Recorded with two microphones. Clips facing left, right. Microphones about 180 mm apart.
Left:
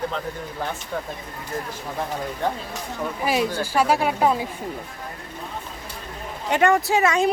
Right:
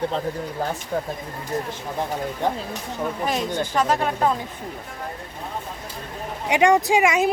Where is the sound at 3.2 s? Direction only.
5° left (ahead or behind).